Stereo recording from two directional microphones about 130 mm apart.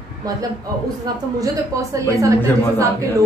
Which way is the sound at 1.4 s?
25° right (ahead or behind).